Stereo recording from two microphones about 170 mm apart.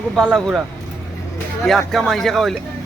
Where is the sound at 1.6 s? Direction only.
Centre (ahead or behind).